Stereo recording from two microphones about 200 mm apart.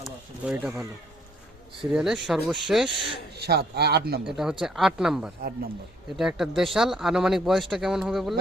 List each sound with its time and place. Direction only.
0.0 s a sound: 5° right (ahead or behind)
1.8 s speech: centre (ahead or behind)
3.3 s speech: 55° right (ahead or behind)
4.3 s speech: 5° right (ahead or behind)